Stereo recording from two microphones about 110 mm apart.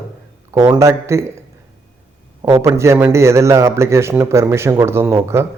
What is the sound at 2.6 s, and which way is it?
A man's voice, 25° right (ahead or behind).